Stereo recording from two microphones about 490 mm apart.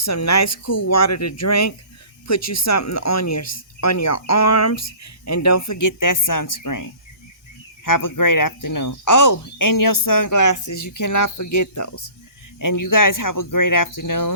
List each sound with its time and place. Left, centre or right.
0.0 s speech: left
7.9 s speech: left